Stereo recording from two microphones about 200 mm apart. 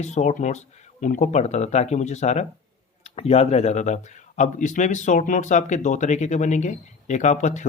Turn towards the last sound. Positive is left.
turn(degrees=35)  # may be behind; listen again after turning